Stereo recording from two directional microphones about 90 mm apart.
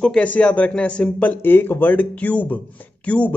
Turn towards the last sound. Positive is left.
turn(degrees=15)  # may be behind; listen again after turning